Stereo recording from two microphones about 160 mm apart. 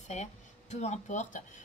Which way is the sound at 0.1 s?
45° left (ahead or behind).